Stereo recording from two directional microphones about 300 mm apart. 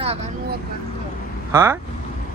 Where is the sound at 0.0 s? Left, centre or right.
Centre.